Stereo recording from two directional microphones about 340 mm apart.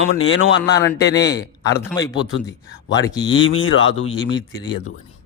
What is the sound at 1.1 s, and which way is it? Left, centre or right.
A man's voice, centre.